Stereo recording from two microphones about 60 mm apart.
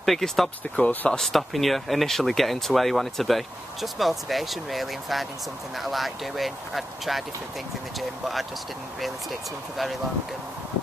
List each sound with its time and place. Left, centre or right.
0.0 s speech: centre
0.8 s speech: centre
1.2 s speech: centre